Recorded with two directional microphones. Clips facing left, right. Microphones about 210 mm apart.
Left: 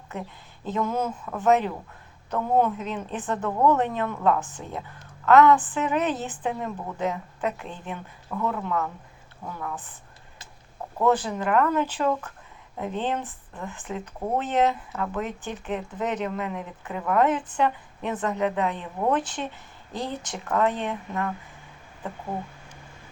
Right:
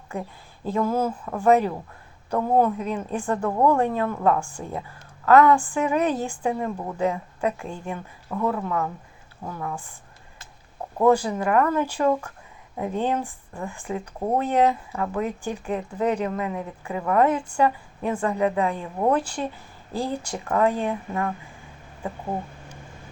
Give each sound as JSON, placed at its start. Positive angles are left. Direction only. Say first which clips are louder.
{"t": 0.6, "sound": "speech", "louder": "right 3 dB", "side_deg": -10}